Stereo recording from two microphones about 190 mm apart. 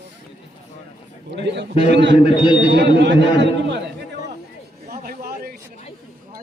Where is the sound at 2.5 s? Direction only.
65° right (ahead or behind).